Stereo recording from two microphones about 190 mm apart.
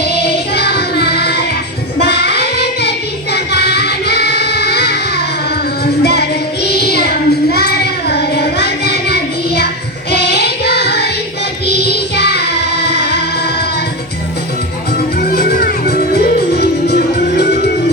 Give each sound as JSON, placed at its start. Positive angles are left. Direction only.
{"t": 0.0, "sound": "music", "side_deg": 60}
{"t": 2.0, "sound": "child singing", "side_deg": 60}
{"t": 3.3, "sound": "music", "side_deg": 60}
{"t": 5.8, "sound": "child singing", "side_deg": 55}
{"t": 10.1, "sound": "music", "side_deg": 60}
{"t": 15.2, "sound": "music", "side_deg": 55}